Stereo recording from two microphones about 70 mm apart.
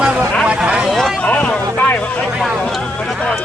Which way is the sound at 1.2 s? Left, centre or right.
Centre.